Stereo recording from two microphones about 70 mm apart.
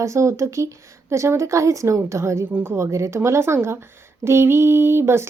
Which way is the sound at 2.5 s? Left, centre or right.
Right.